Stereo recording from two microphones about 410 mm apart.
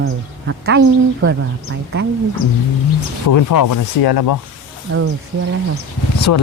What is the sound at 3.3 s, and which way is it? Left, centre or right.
Speech, left.